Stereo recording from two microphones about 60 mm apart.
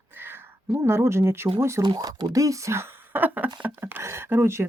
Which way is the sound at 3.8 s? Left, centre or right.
Right.